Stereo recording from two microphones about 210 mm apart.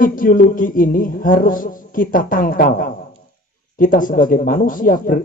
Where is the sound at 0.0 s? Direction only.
40° left (ahead or behind).